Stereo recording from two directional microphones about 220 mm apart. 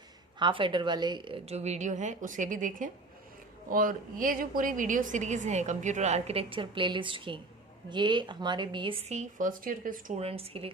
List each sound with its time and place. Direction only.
0.3 s a woman's voice: 20° right (ahead or behind)